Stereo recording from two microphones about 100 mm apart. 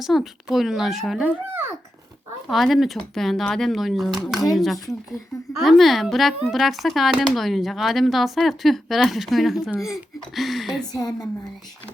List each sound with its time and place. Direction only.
0.0 s speech: 5° right (ahead or behind)
2.5 s speech: centre (ahead or behind)
10.9 s a woman's voice: 40° left (ahead or behind)